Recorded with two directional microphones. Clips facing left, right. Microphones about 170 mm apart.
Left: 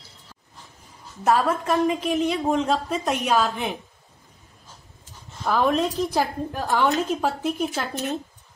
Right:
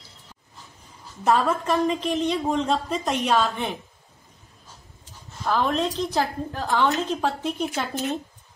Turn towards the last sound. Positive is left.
turn(degrees=5)  # may be behind; listen again after turning